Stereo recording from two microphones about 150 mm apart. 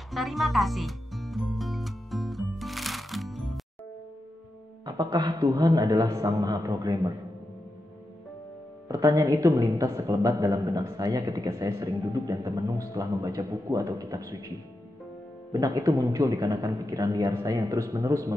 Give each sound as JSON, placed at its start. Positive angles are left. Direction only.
{"t": 0.1, "sound": "music", "side_deg": 0}
{"t": 4.8, "sound": "speech", "side_deg": -30}
{"t": 8.8, "sound": "speech", "side_deg": -20}
{"t": 15.5, "sound": "speech", "side_deg": -25}